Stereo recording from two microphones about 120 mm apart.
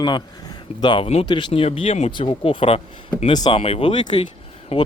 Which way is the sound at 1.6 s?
50° left (ahead or behind).